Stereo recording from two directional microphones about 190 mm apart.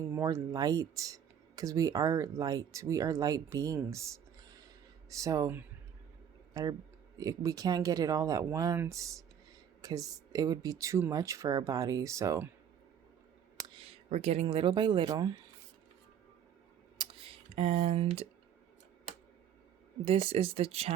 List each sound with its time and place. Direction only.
0.2 s speech: 15° right (ahead or behind)
14.1 s speech: 35° right (ahead or behind)
17.5 s speech: 35° right (ahead or behind)
20.1 s speech: 30° right (ahead or behind)